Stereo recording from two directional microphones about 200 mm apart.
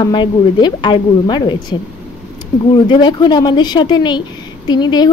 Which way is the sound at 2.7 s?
25° left (ahead or behind).